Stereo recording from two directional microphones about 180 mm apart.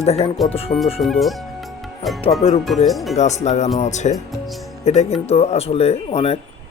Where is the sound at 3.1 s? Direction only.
40° left (ahead or behind).